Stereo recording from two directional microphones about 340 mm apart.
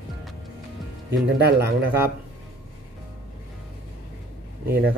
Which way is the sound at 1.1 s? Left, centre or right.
Right.